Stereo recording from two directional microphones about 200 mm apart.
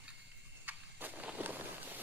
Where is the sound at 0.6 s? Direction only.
10° right (ahead or behind).